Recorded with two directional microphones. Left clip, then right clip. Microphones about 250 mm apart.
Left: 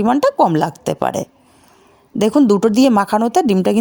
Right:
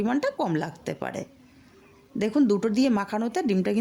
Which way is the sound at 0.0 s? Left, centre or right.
Left.